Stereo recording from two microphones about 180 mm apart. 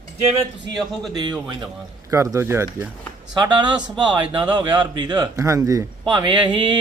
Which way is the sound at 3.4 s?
25° right (ahead or behind).